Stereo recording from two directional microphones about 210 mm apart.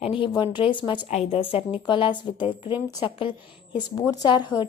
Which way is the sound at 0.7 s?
20° left (ahead or behind).